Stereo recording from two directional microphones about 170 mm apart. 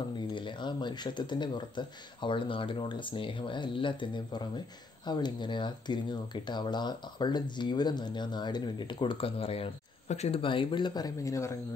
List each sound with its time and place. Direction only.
0.3 s speech: 30° left (ahead or behind)